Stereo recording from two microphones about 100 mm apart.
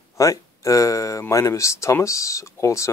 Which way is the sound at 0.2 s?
35° left (ahead or behind).